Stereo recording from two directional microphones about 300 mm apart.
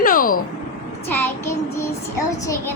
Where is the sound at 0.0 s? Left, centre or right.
Left.